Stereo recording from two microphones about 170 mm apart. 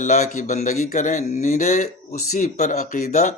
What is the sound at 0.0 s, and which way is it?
Speech, 45° left (ahead or behind).